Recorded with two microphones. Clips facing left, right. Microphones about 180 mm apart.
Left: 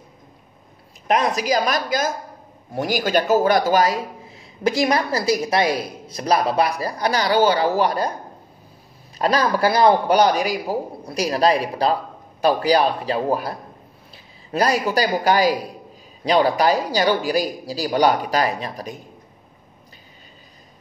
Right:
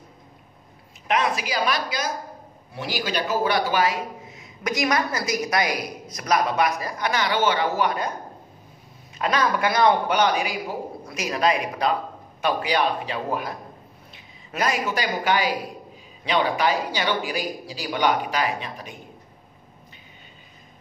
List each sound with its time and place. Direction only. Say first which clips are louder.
1.0 s speech: left 4 dB; 40° left (ahead or behind)
9.2 s speech: left 4 dB; 35° left (ahead or behind)